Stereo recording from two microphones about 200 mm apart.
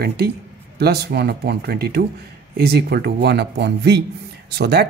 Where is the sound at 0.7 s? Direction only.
50° right (ahead or behind).